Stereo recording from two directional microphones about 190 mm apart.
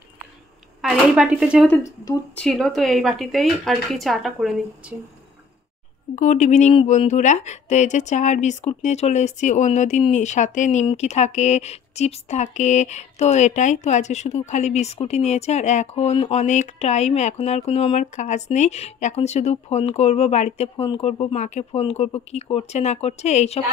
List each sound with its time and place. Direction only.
0.8 s speech: 5° right (ahead or behind)
6.1 s speech: 40° left (ahead or behind)